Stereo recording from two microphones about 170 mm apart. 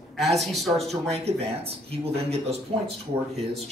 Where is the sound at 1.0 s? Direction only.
40° right (ahead or behind).